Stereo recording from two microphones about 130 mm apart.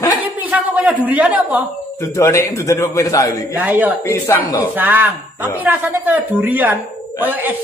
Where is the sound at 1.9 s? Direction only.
25° left (ahead or behind).